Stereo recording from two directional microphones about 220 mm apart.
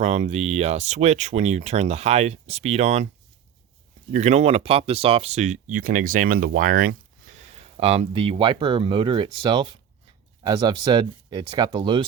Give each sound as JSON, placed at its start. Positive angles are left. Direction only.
{"t": 0.0, "sound": "speech", "side_deg": -30}
{"t": 4.1, "sound": "speech", "side_deg": -30}
{"t": 7.5, "sound": "speech", "side_deg": -30}